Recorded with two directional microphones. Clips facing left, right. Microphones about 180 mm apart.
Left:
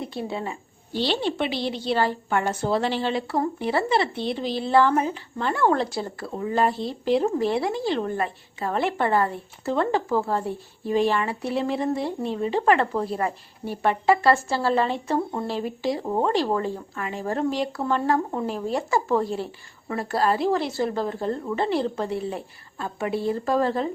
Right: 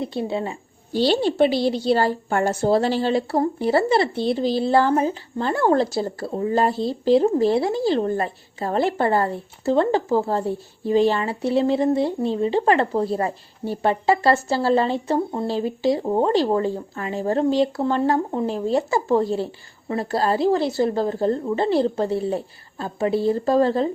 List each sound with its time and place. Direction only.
0.0 s a woman's voice: 25° right (ahead or behind)